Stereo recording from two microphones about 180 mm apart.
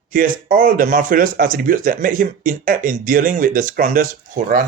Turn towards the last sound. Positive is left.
turn(degrees=-45)  # may be behind; listen again after turning